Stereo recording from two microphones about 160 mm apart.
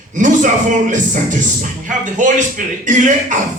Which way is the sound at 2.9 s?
50° right (ahead or behind).